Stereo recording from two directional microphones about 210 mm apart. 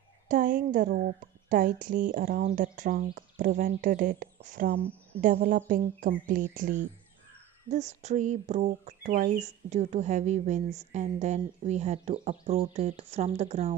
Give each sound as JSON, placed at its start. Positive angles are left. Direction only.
{"t": 0.3, "sound": "speech", "side_deg": -40}